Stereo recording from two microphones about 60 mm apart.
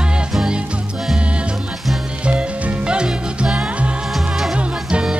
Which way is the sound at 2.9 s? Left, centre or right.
Centre.